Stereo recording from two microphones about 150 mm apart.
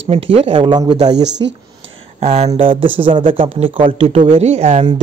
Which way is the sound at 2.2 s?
45° right (ahead or behind).